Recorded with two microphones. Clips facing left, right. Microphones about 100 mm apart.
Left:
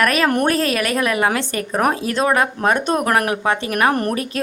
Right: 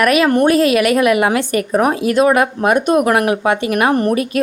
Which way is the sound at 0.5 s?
40° left (ahead or behind).